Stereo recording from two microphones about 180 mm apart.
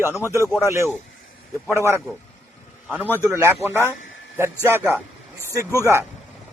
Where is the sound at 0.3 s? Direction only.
15° left (ahead or behind).